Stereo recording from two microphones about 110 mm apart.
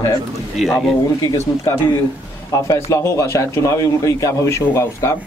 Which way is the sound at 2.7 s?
25° left (ahead or behind).